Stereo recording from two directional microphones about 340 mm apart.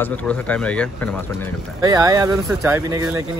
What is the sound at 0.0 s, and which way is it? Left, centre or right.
Speech, centre.